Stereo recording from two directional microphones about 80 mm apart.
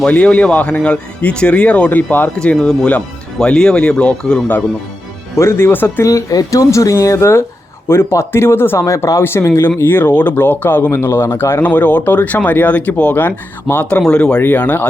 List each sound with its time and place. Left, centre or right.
0.0 s speech: centre
5.4 s speech: left
6.1 s speech: left
14.0 s speech: centre